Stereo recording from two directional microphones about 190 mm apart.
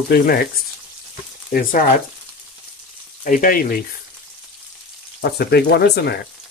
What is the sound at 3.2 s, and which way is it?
Speech, 45° left (ahead or behind).